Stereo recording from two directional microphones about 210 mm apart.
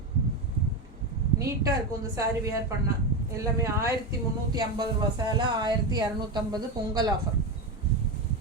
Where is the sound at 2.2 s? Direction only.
15° right (ahead or behind).